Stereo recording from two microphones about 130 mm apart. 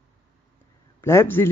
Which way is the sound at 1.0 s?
20° left (ahead or behind).